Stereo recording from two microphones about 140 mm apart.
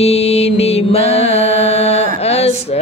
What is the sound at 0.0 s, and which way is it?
Mantra, 45° left (ahead or behind).